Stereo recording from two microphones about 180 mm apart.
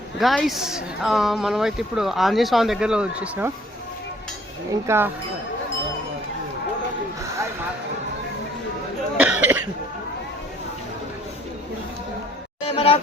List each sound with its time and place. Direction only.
0.2 s speech: centre (ahead or behind)
4.9 s speech: 10° right (ahead or behind)
9.1 s cough: 10° right (ahead or behind)
12.6 s a sound: 30° left (ahead or behind)